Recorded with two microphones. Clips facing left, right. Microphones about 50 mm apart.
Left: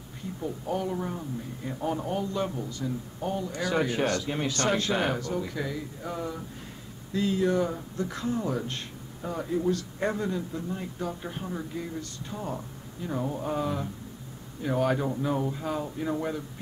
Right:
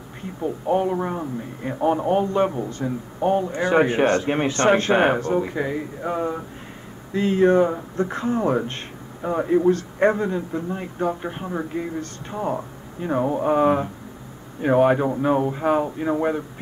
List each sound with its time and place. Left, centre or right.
0.2 s a man's voice: right